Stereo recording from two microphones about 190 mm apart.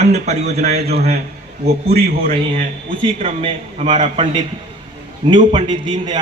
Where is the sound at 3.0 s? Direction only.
30° right (ahead or behind).